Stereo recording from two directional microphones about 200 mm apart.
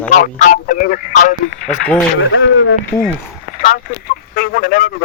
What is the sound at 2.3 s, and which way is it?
Speech, 70° left (ahead or behind).